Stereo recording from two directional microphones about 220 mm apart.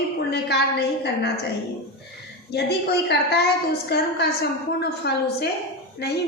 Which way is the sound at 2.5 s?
45° left (ahead or behind).